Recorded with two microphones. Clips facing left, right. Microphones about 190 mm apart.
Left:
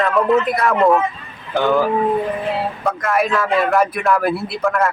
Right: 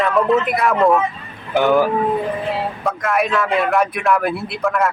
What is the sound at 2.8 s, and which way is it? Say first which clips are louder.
A man's voice: left 1 dB; centre (ahead or behind).